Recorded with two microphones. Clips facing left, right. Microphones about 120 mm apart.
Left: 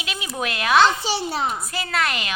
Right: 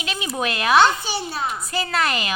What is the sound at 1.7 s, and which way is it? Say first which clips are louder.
Speech: right 2 dB; centre (ahead or behind).